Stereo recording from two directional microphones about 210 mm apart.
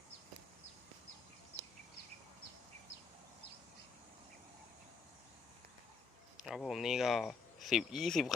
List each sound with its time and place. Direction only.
6.3 s speech: centre (ahead or behind)